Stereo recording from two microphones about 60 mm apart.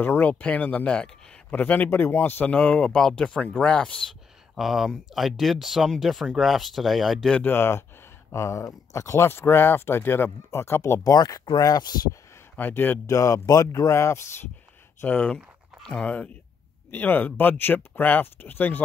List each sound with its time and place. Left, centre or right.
0.0 s speech: left
0.3 s speech: left
1.6 s speech: left
1.9 s speech: left
2.4 s speech: left
4.6 s speech: centre
7.4 s speech: left
8.3 s speech: left
9.3 s speech: left
11.1 s speech: left
12.5 s speech: left
13.0 s speech: left
15.0 s speech: centre